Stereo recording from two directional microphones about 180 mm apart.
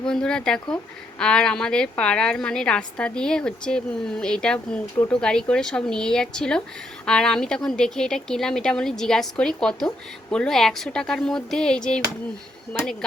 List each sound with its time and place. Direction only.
0.0 s a woman's voice: 5° left (ahead or behind)